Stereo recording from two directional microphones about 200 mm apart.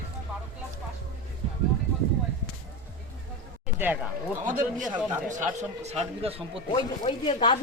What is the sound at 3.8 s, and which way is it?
Speech, 10° right (ahead or behind).